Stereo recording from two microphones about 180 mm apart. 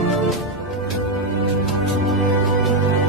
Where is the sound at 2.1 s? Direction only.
Centre (ahead or behind).